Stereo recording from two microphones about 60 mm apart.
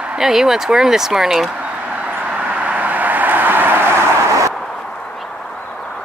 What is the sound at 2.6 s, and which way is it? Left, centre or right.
Vehicle, right.